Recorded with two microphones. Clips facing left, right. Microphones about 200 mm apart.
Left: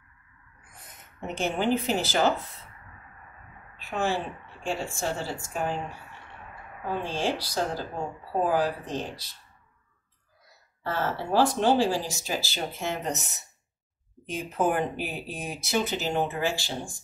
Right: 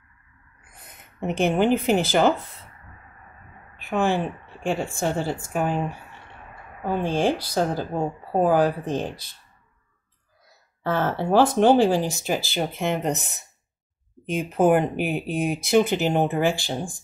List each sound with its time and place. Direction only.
1.2 s speech: 60° right (ahead or behind)
3.7 s a sound: 55° right (ahead or behind)
4.9 s speech: 55° right (ahead or behind)
10.8 s speech: 55° right (ahead or behind)
14.2 s speech: 60° right (ahead or behind)